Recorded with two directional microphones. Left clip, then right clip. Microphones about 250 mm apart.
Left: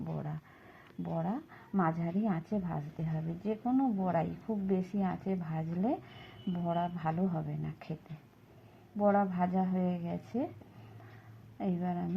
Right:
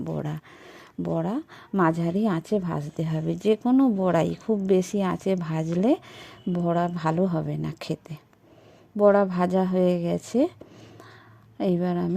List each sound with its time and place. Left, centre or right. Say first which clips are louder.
0.1 s a woman's voice: right 10 dB; right
9.0 s a woman's voice: right 10 dB; right
11.6 s a woman's voice: right 11 dB; right